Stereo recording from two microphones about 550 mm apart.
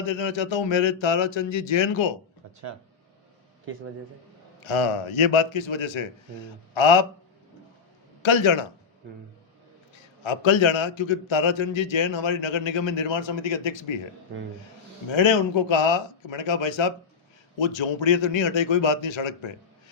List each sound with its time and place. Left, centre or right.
0.1 s a man's voice: left
4.6 s a man's voice: left
8.2 s a man's voice: left
10.2 s a man's voice: left
15.1 s a man's voice: left